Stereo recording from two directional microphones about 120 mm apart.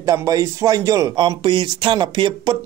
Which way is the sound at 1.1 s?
45° right (ahead or behind).